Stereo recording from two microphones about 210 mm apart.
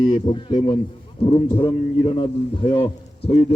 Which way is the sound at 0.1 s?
25° left (ahead or behind).